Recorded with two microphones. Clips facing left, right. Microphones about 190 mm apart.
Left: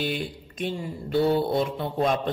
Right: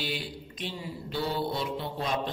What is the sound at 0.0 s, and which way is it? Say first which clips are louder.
Mantra: left 6 dB; 50° left (ahead or behind).